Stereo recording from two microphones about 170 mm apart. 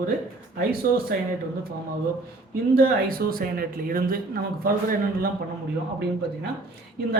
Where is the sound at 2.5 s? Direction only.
60° right (ahead or behind).